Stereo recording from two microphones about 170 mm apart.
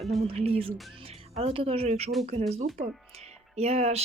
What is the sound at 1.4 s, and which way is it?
Speech, 35° right (ahead or behind).